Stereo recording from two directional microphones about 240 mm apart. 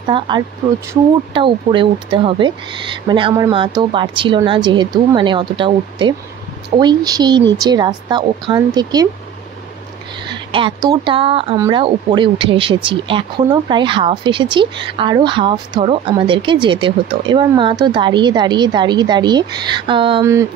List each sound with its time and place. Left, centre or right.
0.1 s speech: right
1.3 s speech: right
10.2 s speech: centre